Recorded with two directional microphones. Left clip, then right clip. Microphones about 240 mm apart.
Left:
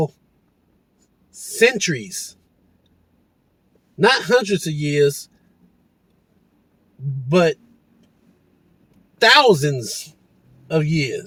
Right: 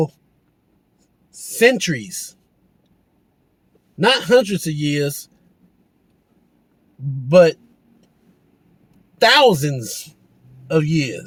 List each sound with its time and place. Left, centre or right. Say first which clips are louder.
1.5 s a man's voice: right 1 dB; right
4.0 s a man's voice: right 1 dB; right
7.3 s a man's voice: right 6 dB; right
9.1 s a man's voice: even; right